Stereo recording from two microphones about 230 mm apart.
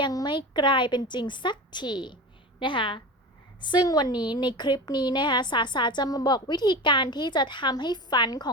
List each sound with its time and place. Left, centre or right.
0.0 s a woman's voice: centre